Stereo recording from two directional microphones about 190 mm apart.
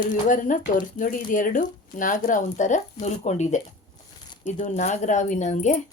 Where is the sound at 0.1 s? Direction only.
45° left (ahead or behind).